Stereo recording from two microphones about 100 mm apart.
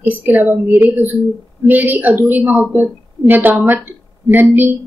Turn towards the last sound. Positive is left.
turn(degrees=-20)  # may be behind; listen again after turning